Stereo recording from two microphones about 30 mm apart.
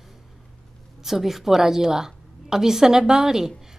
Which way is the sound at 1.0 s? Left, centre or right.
Centre.